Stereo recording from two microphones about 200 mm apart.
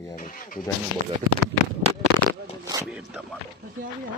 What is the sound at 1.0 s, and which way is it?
Speech, 40° right (ahead or behind).